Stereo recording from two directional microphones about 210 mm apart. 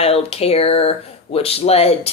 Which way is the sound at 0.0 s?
30° left (ahead or behind).